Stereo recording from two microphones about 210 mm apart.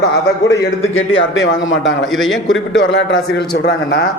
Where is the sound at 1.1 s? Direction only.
60° left (ahead or behind).